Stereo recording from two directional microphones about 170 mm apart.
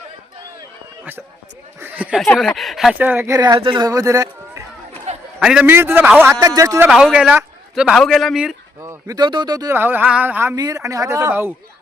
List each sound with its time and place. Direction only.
1.8 s a sound: 10° right (ahead or behind)
2.2 s speech: 5° left (ahead or behind); by 4.6 s 20° right (ahead or behind)
5.1 s a sound: 40° right (ahead or behind)
5.4 s speech: 5° right (ahead or behind)
6.8 s a man's voice: 5° right (ahead or behind)
8.8 s speech: 20° right (ahead or behind)
9.7 s speech: 10° right (ahead or behind)